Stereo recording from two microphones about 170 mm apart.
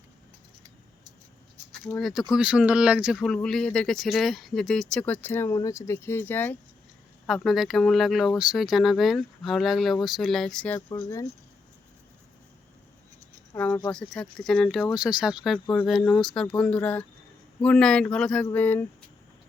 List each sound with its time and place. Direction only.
2.0 s speech: centre (ahead or behind)
7.3 s speech: centre (ahead or behind)
10.8 s speech: 20° left (ahead or behind)
13.6 s speech: 10° left (ahead or behind)